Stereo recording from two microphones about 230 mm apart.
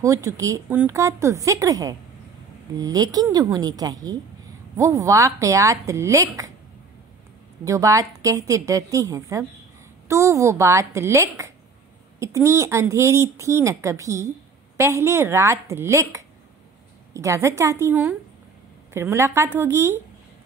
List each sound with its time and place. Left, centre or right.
0.0 s a woman's voice: centre
7.6 s a woman's voice: centre